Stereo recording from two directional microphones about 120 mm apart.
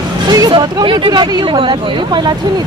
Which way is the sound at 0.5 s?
45° right (ahead or behind).